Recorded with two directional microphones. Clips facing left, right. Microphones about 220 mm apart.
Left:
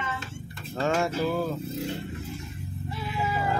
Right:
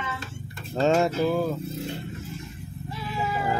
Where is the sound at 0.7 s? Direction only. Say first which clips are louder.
Right 5 dB; 25° right (ahead or behind).